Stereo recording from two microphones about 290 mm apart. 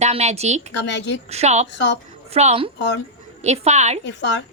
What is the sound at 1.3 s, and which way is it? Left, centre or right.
A woman's voice, right.